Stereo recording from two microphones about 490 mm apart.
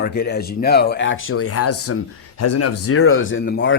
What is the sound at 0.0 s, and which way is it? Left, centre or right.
Speech, centre.